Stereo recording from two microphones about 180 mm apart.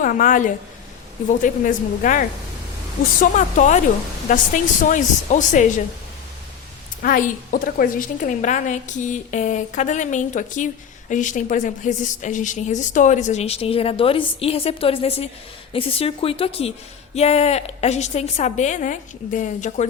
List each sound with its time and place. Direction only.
0.0 s a woman's voice: 50° left (ahead or behind)
7.0 s a woman's voice: 50° left (ahead or behind)